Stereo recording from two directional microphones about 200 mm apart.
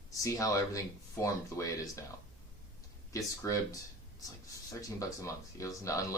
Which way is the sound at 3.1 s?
15° left (ahead or behind).